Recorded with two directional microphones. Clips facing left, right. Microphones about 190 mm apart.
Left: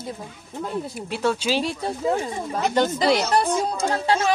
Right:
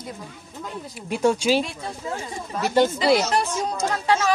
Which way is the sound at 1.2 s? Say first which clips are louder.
Right 3 dB; 10° right (ahead or behind).